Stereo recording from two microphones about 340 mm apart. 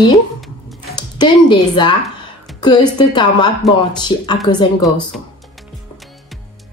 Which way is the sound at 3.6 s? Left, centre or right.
Centre.